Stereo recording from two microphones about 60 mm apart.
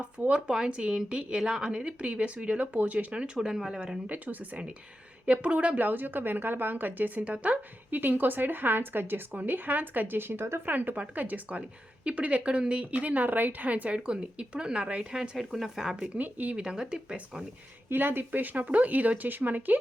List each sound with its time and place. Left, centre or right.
0.0 s a woman's voice: centre
4.0 s a woman's voice: right
10.7 s a woman's voice: right; by 16.0 s centre
16.1 s a woman's voice: right
16.6 s a woman's voice: centre
17.8 s a woman's voice: right